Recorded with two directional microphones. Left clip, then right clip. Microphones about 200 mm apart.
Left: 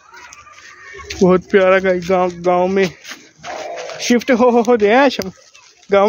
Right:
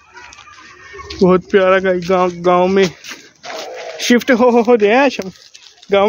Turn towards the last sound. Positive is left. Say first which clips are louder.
# even
turn(degrees=5)  # may be behind; listen again after turning